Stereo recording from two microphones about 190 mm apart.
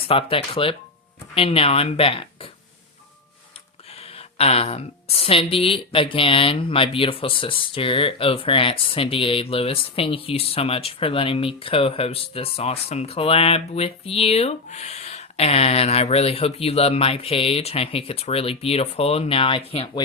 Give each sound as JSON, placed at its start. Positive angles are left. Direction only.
{"t": 0.1, "sound": "speech", "side_deg": 30}
{"t": 3.9, "sound": "speech", "side_deg": 30}